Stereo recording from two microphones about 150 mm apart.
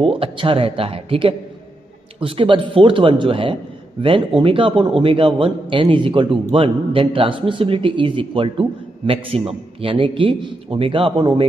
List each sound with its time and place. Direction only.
0.0 s a man's voice: 35° right (ahead or behind)